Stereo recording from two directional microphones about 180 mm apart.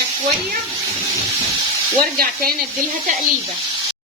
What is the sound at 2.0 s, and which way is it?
Speech, 55° right (ahead or behind).